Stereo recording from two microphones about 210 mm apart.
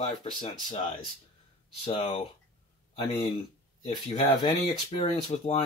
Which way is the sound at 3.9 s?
20° left (ahead or behind).